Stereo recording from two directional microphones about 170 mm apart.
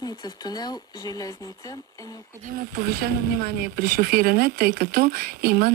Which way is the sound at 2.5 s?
60° right (ahead or behind).